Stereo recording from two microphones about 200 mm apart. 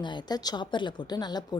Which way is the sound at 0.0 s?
20° left (ahead or behind).